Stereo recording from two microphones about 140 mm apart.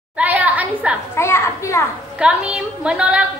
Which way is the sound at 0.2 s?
10° right (ahead or behind).